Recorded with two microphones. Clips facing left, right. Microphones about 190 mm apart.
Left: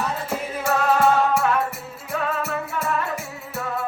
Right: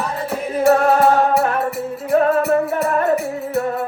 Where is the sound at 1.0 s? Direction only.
35° right (ahead or behind).